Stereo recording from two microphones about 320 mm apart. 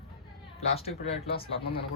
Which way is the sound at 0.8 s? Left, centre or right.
Centre.